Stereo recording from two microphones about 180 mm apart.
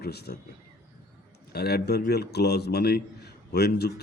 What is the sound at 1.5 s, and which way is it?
A man's voice, 60° left (ahead or behind).